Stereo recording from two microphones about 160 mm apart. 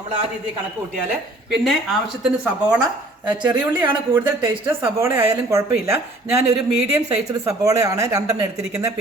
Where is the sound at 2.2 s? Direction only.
5° right (ahead or behind).